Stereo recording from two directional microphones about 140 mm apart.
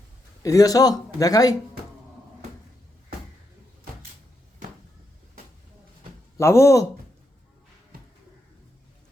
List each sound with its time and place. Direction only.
0.4 s a man's voice: 25° left (ahead or behind)
6.3 s a man's voice: 20° left (ahead or behind)